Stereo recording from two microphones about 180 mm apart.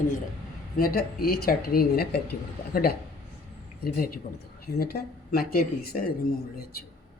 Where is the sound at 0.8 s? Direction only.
55° left (ahead or behind).